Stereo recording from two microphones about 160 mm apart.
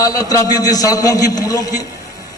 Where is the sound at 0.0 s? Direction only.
20° left (ahead or behind).